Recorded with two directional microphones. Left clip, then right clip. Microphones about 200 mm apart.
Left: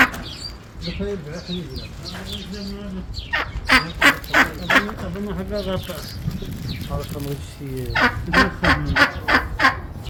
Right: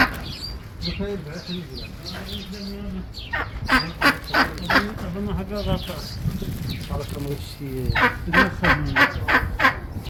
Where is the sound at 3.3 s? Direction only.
15° left (ahead or behind).